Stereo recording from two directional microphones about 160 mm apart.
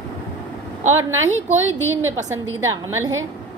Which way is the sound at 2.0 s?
15° right (ahead or behind).